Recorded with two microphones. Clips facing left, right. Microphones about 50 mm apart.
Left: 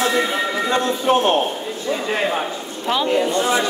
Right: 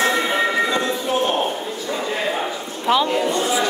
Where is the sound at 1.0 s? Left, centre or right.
Left.